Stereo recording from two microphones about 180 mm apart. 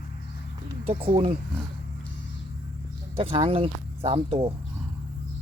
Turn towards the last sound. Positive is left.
turn(degrees=-30)  # may be behind; listen again after turning